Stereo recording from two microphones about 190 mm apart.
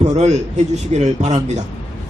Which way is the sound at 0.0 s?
35° right (ahead or behind).